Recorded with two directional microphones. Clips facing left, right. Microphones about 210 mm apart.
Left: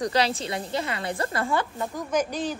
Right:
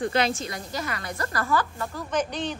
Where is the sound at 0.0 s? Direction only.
35° left (ahead or behind).